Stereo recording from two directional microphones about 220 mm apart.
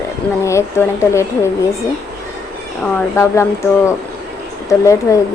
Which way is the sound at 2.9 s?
10° left (ahead or behind).